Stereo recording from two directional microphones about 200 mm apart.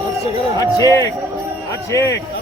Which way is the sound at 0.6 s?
15° left (ahead or behind).